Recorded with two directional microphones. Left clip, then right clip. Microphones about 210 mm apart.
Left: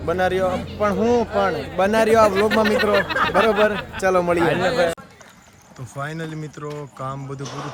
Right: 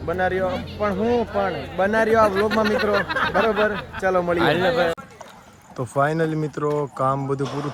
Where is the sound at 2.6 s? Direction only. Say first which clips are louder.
Left 2 dB; 20° left (ahead or behind).